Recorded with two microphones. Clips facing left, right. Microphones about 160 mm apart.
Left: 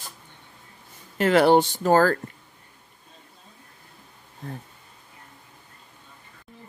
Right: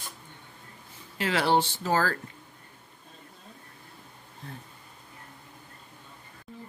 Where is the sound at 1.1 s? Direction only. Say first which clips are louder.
Left 8 dB; 50° left (ahead or behind).